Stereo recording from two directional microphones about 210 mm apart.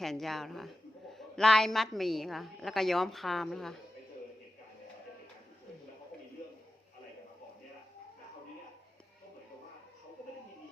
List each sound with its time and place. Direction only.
0.0 s a woman's voice: centre (ahead or behind)